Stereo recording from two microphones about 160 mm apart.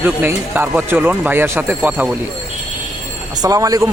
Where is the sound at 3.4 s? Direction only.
20° right (ahead or behind).